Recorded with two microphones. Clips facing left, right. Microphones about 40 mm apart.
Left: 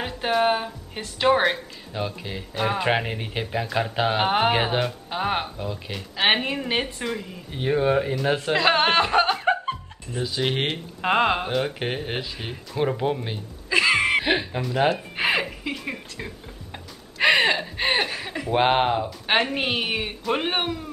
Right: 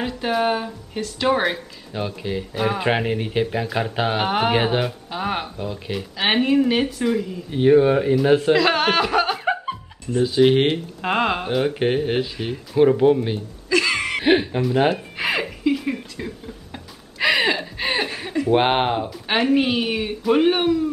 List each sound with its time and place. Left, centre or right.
0.0 s speech: centre
2.0 s speech: centre
5.1 s speech: centre
5.6 s speech: centre
6.1 s speech: centre
8.5 s chuckle: centre
10.2 s speech: centre
13.7 s music: centre
14.2 s speech: centre
15.1 s a sound: centre
18.0 s chuckle: centre
18.5 s speech: centre
19.3 s speech: centre